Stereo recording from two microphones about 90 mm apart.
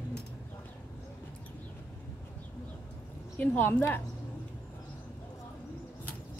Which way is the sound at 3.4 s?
20° left (ahead or behind).